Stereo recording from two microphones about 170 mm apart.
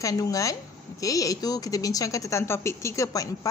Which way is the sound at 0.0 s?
20° left (ahead or behind).